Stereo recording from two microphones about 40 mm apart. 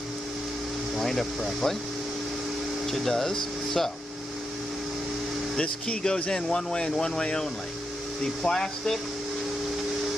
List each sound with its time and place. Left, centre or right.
0.9 s speech: centre
2.9 s speech: centre
5.6 s speech: left